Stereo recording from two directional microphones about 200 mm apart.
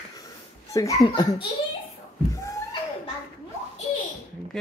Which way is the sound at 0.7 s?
15° left (ahead or behind).